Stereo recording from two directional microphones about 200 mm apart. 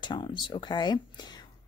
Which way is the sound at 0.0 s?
25° left (ahead or behind).